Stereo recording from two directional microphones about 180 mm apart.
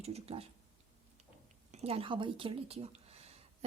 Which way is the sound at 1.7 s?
35° right (ahead or behind).